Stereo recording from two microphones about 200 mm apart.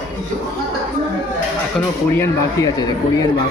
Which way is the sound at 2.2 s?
15° left (ahead or behind).